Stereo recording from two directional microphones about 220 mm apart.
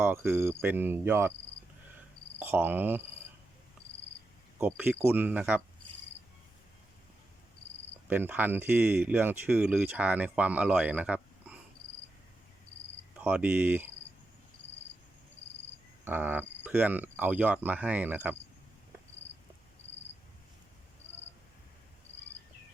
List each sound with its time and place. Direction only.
0.0 s speech: 10° right (ahead or behind)
2.4 s speech: 10° right (ahead or behind)
4.5 s speech: 10° right (ahead or behind)
8.0 s speech: 10° right (ahead or behind)
13.1 s speech: 5° right (ahead or behind)
16.0 s speech: 10° right (ahead or behind)